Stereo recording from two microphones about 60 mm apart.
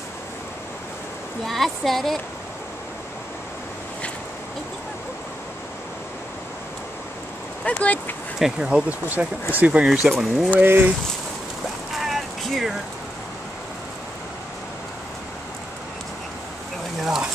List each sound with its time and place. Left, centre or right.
1.4 s speech: centre
7.6 s speech: left
8.4 s speech: centre
8.8 s speech: right
10.0 s speech: centre
10.6 s speech: right
12.0 s a sound: centre